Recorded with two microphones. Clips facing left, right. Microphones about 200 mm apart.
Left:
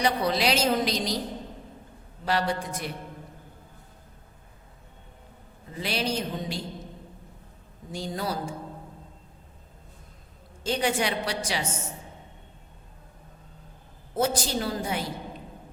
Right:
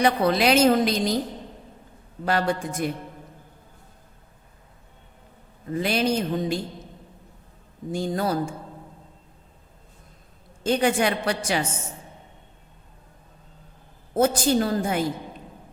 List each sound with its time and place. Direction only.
0.0 s a woman's voice: 55° right (ahead or behind)
2.2 s a woman's voice: 50° right (ahead or behind)
5.7 s a woman's voice: 50° right (ahead or behind)
7.9 s a woman's voice: 50° right (ahead or behind)
10.6 s a woman's voice: 55° right (ahead or behind)
14.2 s a woman's voice: 50° right (ahead or behind)